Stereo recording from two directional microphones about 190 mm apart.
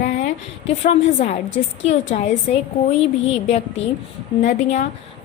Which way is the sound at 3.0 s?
35° left (ahead or behind).